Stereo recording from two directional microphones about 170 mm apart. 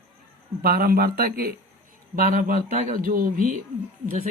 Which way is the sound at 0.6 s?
60° right (ahead or behind).